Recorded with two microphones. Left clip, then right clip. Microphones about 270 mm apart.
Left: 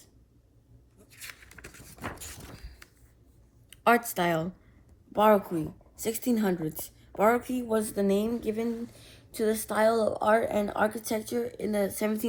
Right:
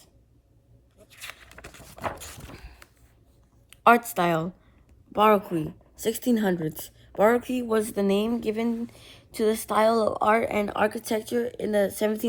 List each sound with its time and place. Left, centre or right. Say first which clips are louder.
1.4 s vehicle: right 3 dB; centre
2.5 s a sound: right 4 dB; right
3.8 s speech: right 5 dB; right
6.6 s a woman's voice: right 3 dB; centre
7.2 s speech: right 3 dB; right